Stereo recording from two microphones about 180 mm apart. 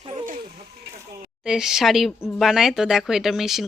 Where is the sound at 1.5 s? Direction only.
5° right (ahead or behind).